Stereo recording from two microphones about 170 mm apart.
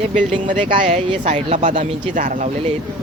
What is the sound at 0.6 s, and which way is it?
Speech, 30° right (ahead or behind).